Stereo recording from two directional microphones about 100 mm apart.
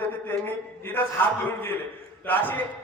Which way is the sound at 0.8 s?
20° left (ahead or behind).